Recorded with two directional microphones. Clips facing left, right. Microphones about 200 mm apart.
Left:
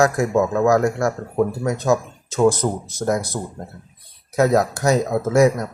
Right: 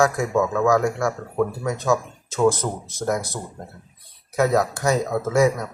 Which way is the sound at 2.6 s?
20° left (ahead or behind).